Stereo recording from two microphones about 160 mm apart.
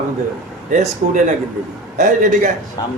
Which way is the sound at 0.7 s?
50° right (ahead or behind).